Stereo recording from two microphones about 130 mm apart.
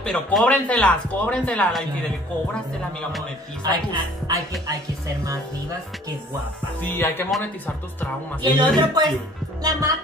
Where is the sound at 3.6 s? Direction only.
30° right (ahead or behind).